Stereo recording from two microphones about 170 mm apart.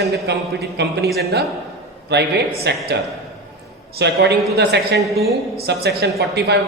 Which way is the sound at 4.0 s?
80° right.